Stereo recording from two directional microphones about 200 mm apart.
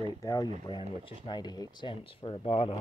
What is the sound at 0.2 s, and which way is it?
Speech, 20° left (ahead or behind).